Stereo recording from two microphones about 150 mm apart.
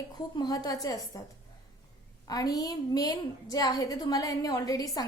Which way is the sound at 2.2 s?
25° left (ahead or behind).